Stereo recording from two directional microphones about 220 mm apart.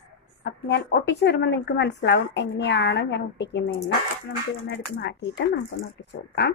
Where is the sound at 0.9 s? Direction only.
50° left (ahead or behind).